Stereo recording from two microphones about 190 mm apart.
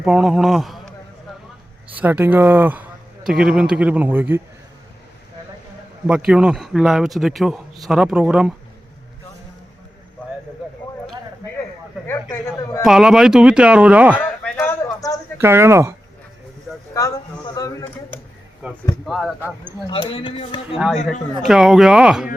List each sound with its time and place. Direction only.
0.0 s speech: centre (ahead or behind)
1.9 s a man's voice: 10° right (ahead or behind)
6.1 s speech: 5° right (ahead or behind)
12.0 s a woman's voice: 15° left (ahead or behind)
12.8 s speech: centre (ahead or behind)
14.2 s a sound: 10° left (ahead or behind)
15.4 s a man's voice: 10° right (ahead or behind)
16.9 s a sound: 15° left (ahead or behind)
19.0 s speech: centre (ahead or behind)
19.9 s speech: 30° left (ahead or behind)
20.7 s speech: centre (ahead or behind)